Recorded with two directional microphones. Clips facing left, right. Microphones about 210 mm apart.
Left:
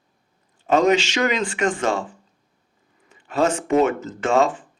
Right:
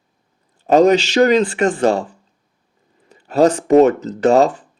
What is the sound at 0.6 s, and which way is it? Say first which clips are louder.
Speech: right 6 dB; 35° right (ahead or behind).